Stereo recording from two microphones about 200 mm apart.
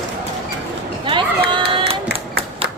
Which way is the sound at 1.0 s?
25° right (ahead or behind).